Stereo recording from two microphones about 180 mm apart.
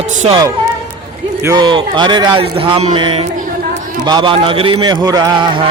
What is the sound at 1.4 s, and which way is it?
A man's voice, 20° right (ahead or behind).